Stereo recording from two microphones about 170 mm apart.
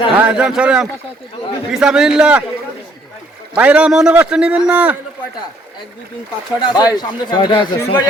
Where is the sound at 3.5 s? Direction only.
10° right (ahead or behind).